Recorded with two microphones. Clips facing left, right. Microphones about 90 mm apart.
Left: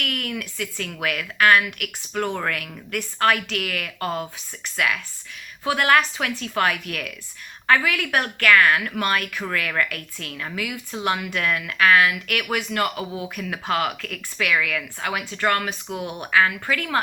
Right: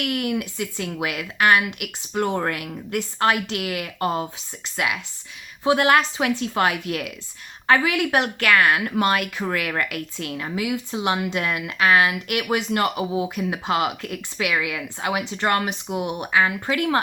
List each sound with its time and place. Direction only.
0.0 s a woman's voice: 20° right (ahead or behind)
5.6 s a woman's voice: 20° right (ahead or behind)